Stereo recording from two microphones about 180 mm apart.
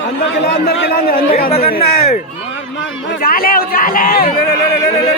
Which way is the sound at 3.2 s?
55° left (ahead or behind).